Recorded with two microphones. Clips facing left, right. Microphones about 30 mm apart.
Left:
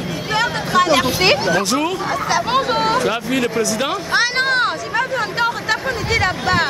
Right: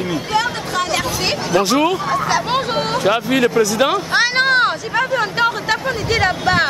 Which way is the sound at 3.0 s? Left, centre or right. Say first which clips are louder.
Right 3 dB; centre.